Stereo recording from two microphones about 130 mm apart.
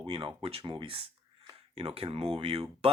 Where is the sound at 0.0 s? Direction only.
40° right (ahead or behind).